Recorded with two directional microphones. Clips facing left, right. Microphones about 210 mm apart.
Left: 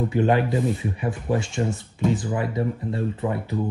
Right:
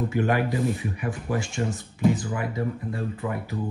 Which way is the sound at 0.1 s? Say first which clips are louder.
Left 3 dB; 20° left (ahead or behind).